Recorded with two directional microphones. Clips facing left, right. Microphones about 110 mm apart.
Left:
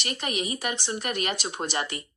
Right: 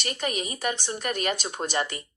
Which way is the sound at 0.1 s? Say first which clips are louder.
Even; 40° right (ahead or behind).